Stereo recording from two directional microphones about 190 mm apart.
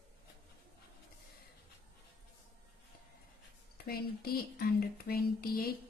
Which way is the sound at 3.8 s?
55° left (ahead or behind).